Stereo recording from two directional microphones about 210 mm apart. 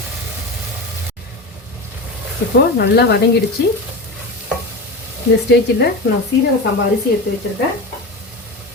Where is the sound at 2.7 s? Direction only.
50° left (ahead or behind).